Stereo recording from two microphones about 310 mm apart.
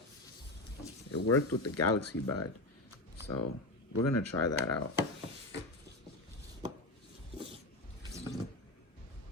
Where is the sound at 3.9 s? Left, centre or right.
Left.